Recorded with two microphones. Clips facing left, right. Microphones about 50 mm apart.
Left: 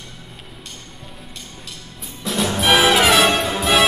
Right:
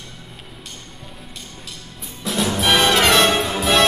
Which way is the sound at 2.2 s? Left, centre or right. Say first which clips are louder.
Left 1 dB; centre.